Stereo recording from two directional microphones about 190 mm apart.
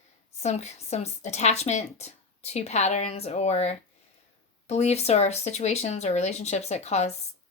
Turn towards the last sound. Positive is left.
turn(degrees=35)  # may be behind; listen again after turning